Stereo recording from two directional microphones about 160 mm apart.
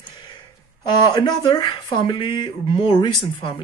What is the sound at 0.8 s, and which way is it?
Speech, 25° left (ahead or behind).